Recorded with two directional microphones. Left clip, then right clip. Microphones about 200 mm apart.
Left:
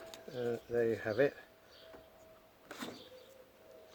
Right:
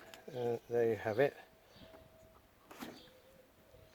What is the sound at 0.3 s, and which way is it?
Speech, 40° right (ahead or behind).